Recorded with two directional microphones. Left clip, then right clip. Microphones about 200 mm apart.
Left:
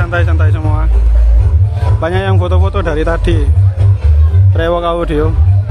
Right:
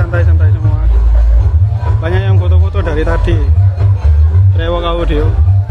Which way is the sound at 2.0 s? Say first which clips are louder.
Left 4 dB; 30° left (ahead or behind).